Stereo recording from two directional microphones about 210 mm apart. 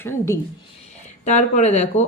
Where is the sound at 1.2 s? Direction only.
35° left (ahead or behind).